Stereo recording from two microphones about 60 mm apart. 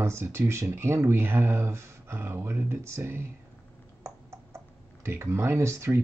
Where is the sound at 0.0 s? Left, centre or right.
Right.